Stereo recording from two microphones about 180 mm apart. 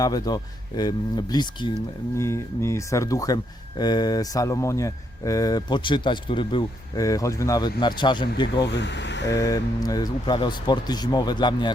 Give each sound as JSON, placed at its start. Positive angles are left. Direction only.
{"t": 0.0, "sound": "speech", "side_deg": 20}
{"t": 8.6, "sound": "speech", "side_deg": 75}
{"t": 9.3, "sound": "speech", "side_deg": 20}